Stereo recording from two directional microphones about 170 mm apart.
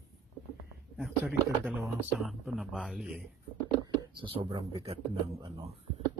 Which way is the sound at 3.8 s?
30° right (ahead or behind).